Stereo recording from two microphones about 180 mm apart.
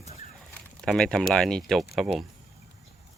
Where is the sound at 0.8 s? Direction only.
5° left (ahead or behind).